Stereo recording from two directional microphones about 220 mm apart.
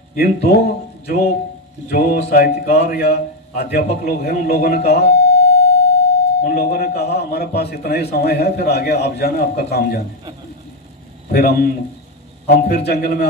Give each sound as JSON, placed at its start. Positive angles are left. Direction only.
{"t": 0.1, "sound": "speech", "side_deg": 45}
{"t": 11.3, "sound": "speech", "side_deg": 45}